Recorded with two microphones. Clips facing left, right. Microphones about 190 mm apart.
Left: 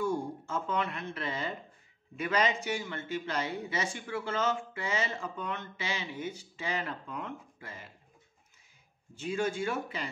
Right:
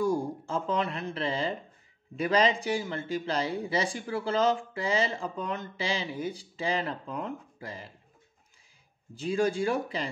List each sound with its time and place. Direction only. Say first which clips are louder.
0.0 s speech: right 4 dB; 35° right (ahead or behind)
9.1 s speech: right 5 dB; 35° right (ahead or behind)